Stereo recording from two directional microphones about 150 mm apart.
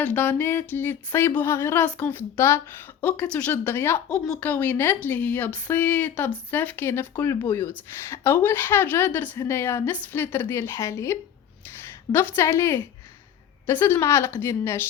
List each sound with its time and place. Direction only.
0.0 s speech: 10° left (ahead or behind)
12.4 s speech: 15° left (ahead or behind)